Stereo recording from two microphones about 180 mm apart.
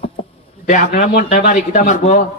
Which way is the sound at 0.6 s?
45° left (ahead or behind).